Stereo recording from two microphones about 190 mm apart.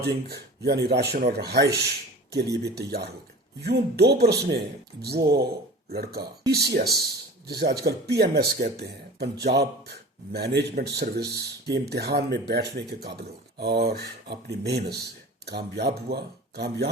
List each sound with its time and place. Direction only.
0.0 s speech: 60° right (ahead or behind)